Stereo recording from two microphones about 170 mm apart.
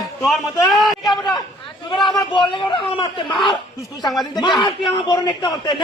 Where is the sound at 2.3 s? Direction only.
30° left (ahead or behind).